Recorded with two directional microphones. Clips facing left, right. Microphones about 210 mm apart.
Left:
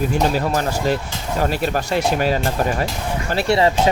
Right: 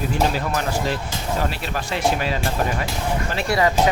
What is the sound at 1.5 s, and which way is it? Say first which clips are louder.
Speech: left 7 dB; 45° left (ahead or behind).